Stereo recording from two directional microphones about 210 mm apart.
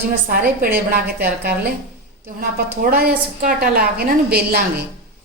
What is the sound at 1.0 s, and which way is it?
Speech, 50° right (ahead or behind).